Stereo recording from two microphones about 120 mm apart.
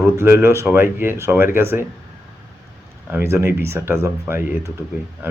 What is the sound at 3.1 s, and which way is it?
Speech, 20° right (ahead or behind).